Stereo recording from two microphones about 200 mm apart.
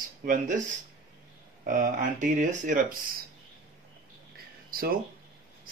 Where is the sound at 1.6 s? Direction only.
40° right (ahead or behind).